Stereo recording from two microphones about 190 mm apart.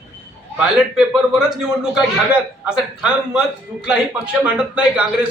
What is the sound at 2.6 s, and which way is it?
A man's voice, 5° right (ahead or behind).